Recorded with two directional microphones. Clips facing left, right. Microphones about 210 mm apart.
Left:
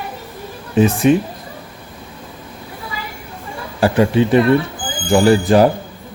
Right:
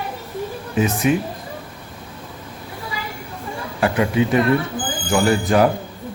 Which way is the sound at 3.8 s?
30° left (ahead or behind).